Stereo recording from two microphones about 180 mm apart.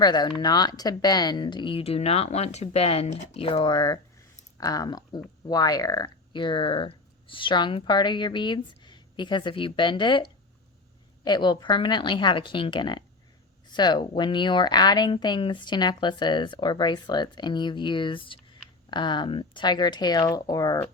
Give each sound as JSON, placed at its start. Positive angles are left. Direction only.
{"t": 0.0, "sound": "speech", "side_deg": 25}